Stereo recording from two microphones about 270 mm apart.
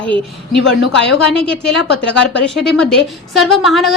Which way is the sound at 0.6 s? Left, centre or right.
Left.